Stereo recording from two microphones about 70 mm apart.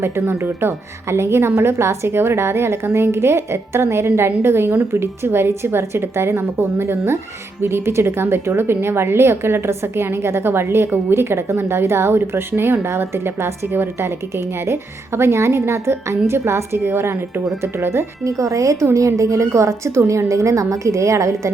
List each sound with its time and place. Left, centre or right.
0.0 s a woman's voice: right